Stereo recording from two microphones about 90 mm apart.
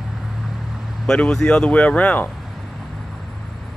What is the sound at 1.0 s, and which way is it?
Speech, 10° left (ahead or behind).